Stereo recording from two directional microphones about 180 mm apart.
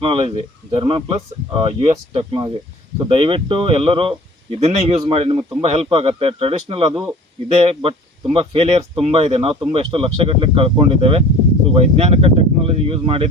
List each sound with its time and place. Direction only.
0.0 s speech: 30° right (ahead or behind)